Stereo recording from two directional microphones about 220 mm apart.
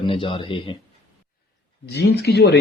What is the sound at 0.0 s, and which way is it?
Speech, 25° left (ahead or behind).